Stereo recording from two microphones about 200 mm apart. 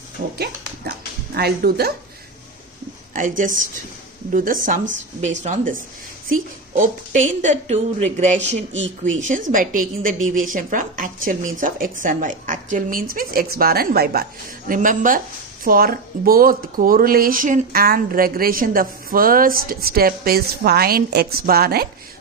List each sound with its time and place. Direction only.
1.4 s speech: 55° right (ahead or behind)
3.1 s a woman's voice: 40° right (ahead or behind)